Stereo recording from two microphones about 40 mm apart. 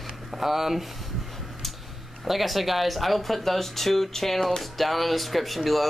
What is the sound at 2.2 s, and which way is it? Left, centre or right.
Speech, centre.